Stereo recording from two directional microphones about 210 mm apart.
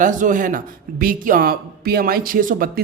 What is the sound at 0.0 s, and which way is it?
Speech, 40° right (ahead or behind).